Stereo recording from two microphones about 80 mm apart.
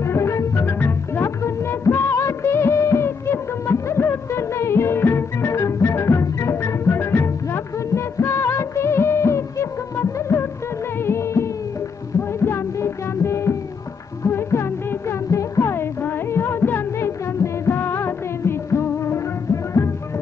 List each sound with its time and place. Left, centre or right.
0.0 s music: left